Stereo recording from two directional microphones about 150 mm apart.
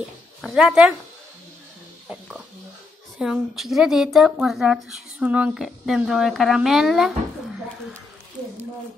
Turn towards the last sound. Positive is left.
turn(degrees=0)  # may be behind; listen again after turning